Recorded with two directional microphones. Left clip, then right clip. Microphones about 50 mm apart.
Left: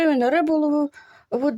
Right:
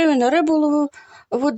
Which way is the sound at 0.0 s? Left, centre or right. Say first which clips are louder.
Right 3 dB; right.